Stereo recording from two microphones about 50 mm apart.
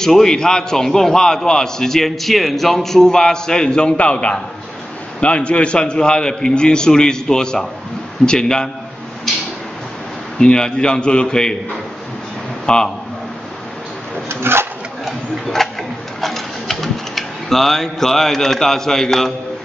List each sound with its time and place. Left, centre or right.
0.0 s a man's voice: centre
10.4 s a man's voice: centre
12.6 s a man's voice: centre
14.3 s speech: right
15.0 s speech: centre